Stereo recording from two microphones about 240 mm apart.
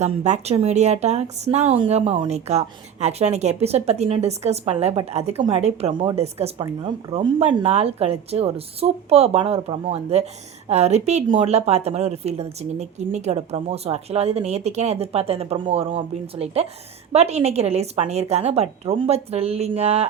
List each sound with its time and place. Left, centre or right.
0.0 s a woman's voice: right